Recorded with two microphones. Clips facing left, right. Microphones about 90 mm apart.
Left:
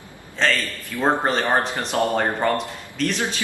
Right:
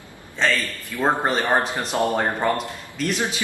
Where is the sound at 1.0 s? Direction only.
5° right (ahead or behind).